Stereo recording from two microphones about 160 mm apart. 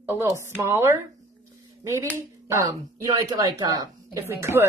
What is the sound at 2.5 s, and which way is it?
Speech, 20° right (ahead or behind).